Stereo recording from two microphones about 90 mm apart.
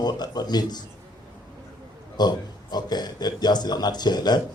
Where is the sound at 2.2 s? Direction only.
50° left (ahead or behind).